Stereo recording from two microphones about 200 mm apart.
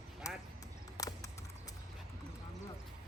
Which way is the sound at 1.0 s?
15° left (ahead or behind).